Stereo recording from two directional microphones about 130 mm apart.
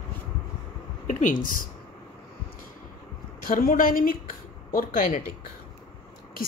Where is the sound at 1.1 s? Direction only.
80° left.